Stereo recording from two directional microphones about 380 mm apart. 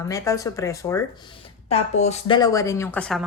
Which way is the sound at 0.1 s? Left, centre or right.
Centre.